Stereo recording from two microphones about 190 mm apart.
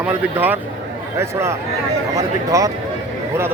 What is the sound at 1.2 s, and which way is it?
Speech, 15° right (ahead or behind).